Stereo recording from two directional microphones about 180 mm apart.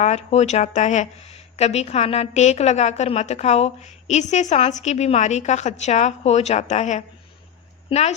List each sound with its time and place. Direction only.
0.0 s a woman's voice: 35° left (ahead or behind)